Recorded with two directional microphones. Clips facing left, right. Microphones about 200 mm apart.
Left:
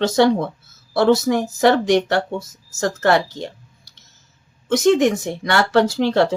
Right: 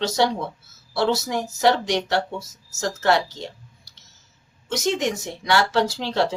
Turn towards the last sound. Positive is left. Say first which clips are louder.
# left 6 dB
turn(degrees=55)  # may be behind; listen again after turning